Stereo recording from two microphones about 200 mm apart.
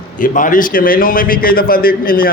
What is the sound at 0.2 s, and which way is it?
A man's voice, 40° left (ahead or behind).